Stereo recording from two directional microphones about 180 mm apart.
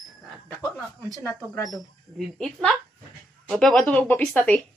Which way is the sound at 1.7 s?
Centre (ahead or behind).